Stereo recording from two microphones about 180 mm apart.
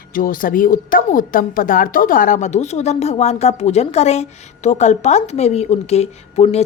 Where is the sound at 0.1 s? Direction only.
50° left (ahead or behind).